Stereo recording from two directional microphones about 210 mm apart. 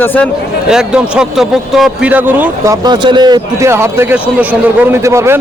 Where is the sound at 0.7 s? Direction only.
5° right (ahead or behind).